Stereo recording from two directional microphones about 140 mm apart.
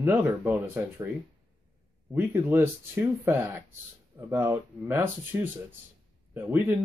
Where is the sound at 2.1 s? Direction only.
15° right (ahead or behind).